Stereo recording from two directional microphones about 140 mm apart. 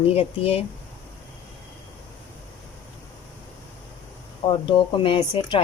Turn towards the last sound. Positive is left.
turn(degrees=40)  # may be behind; listen again after turning